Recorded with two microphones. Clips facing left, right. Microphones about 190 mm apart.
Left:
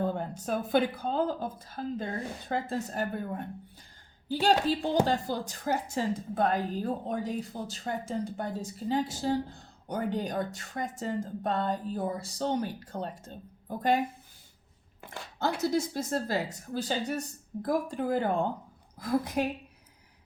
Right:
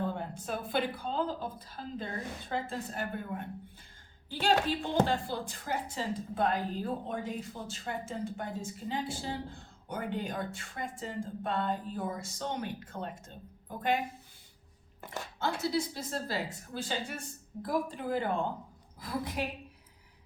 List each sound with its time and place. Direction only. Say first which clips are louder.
0.0 s a woman's voice: left 4 dB; 40° left (ahead or behind)
15.7 s a woman's voice: left 4 dB; 45° left (ahead or behind)